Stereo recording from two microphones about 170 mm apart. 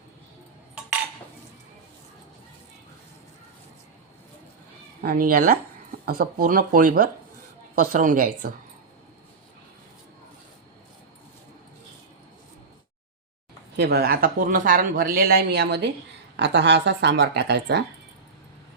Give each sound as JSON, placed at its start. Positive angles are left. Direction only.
{"t": 5.0, "sound": "a woman's voice", "side_deg": -60}
{"t": 13.7, "sound": "speech", "side_deg": -75}
{"t": 16.4, "sound": "speech", "side_deg": -90}